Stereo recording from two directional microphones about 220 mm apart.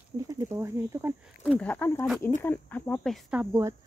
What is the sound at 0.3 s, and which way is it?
Speech, 15° right (ahead or behind).